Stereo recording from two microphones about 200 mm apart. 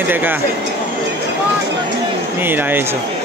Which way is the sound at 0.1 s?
10° right (ahead or behind).